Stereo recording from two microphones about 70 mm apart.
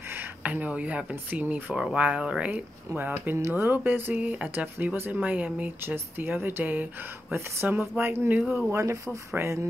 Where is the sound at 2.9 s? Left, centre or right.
Right.